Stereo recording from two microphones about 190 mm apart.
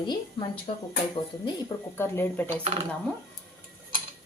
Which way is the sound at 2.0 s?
10° left (ahead or behind).